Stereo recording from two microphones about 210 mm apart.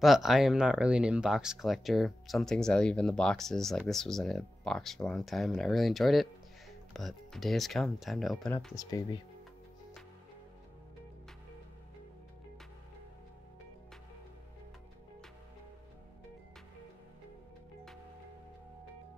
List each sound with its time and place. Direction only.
0.0 s speech: centre (ahead or behind)
8.7 s speech: 20° left (ahead or behind)